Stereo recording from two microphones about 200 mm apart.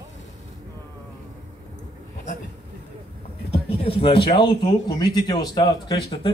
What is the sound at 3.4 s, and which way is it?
A man's voice, 30° left (ahead or behind).